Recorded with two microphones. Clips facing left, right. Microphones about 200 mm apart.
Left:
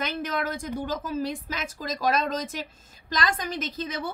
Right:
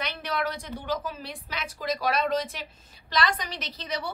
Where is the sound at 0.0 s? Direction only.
45° left (ahead or behind).